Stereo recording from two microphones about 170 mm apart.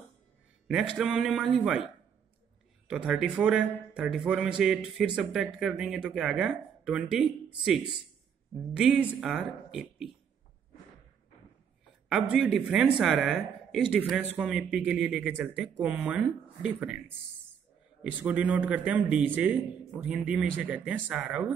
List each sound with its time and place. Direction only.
0.7 s speech: 5° right (ahead or behind)
2.9 s speech: 5° right (ahead or behind)
12.1 s a man's voice: 5° right (ahead or behind)
18.2 s a man's voice: 10° right (ahead or behind)